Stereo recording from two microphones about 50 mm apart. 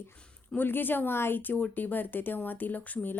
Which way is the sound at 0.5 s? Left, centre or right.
Left.